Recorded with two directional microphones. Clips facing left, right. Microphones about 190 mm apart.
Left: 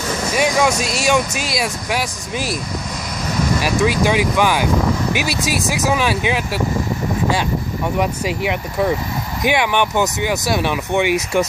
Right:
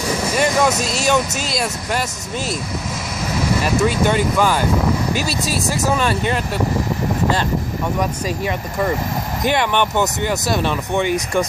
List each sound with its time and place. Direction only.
0.0 s vehicle: 10° right (ahead or behind)
0.3 s speech: centre (ahead or behind)
3.6 s speech: 5° left (ahead or behind)
5.1 s speech: 65° left (ahead or behind)
5.8 s speech: 5° left (ahead or behind)
8.5 s speech: 5° left (ahead or behind)